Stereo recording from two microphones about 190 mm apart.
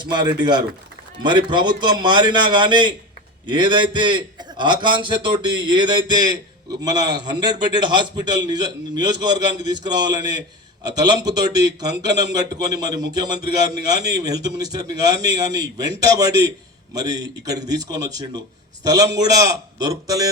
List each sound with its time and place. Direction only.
0.0 s a man's voice: 20° right (ahead or behind)